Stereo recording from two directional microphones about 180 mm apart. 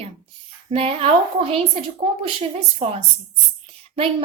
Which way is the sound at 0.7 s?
35° right (ahead or behind).